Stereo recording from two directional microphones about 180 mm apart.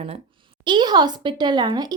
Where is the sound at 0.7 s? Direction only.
25° right (ahead or behind).